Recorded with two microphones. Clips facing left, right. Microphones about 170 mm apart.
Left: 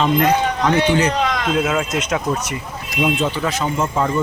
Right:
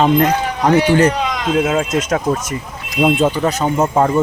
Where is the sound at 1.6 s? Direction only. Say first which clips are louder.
Right 3 dB; 25° right (ahead or behind).